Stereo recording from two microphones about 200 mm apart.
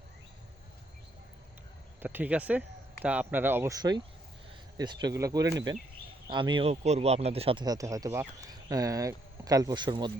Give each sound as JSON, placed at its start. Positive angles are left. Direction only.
{"t": 2.0, "sound": "speech", "side_deg": -10}